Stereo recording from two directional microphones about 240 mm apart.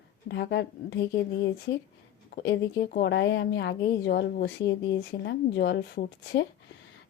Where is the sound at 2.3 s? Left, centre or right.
Left.